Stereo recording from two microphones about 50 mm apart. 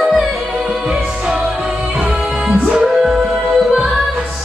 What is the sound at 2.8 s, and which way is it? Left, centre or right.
Music, centre.